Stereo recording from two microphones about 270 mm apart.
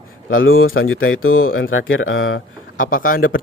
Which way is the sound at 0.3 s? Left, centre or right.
Left.